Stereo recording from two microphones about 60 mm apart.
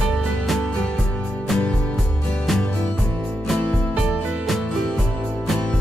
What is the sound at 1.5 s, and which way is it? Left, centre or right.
Music, centre.